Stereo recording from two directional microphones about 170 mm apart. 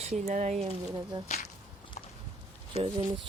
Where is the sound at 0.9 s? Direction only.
25° right (ahead or behind).